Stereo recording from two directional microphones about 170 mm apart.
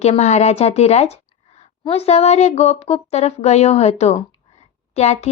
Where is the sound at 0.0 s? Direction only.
40° left (ahead or behind).